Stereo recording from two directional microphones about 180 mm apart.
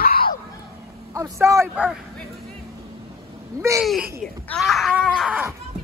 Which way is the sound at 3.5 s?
15° right (ahead or behind).